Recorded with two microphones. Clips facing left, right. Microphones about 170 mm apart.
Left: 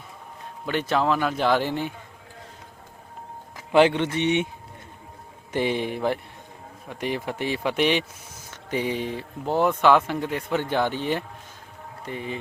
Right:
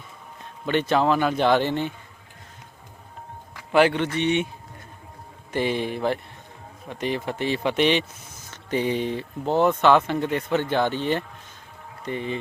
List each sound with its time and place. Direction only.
0.6 s speech: 5° left (ahead or behind)
3.7 s speech: 20° left (ahead or behind)
5.5 s speech: 15° left (ahead or behind)